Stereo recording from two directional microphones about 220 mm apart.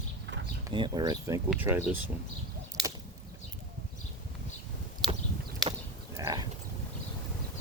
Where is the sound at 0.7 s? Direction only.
20° right (ahead or behind).